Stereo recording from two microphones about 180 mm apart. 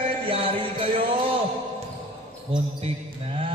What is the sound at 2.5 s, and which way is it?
Mantra, 30° right (ahead or behind).